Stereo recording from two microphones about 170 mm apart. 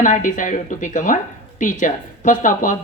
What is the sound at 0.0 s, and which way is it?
A woman's voice, 50° left (ahead or behind).